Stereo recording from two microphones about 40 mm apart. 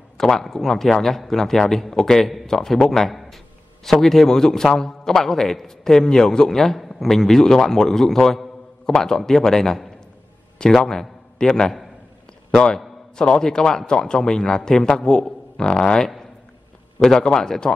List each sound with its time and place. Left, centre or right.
0.2 s a man's voice: centre
12.4 s a sound: left
13.1 s a man's voice: left